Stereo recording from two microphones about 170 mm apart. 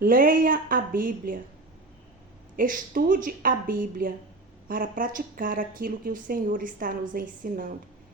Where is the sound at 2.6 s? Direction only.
55° right (ahead or behind).